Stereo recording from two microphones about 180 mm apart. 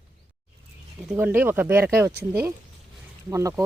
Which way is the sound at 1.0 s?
10° right (ahead or behind).